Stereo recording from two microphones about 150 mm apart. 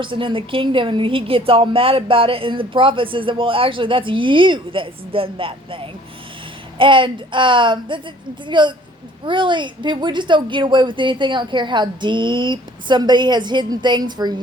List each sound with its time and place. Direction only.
0.0 s a woman's voice: 35° right (ahead or behind)